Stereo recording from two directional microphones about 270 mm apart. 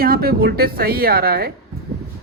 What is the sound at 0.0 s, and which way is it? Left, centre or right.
Speech, right.